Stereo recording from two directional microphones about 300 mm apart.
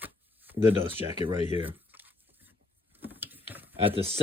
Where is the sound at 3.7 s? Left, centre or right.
Centre.